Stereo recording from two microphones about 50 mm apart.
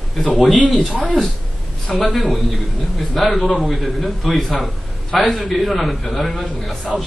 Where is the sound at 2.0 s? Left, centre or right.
Centre.